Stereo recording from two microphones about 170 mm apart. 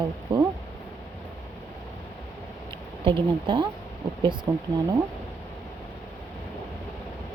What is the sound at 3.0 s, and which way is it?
Speech, 30° right (ahead or behind).